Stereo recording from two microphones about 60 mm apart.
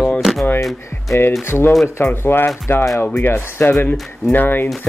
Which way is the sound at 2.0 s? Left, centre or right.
Left.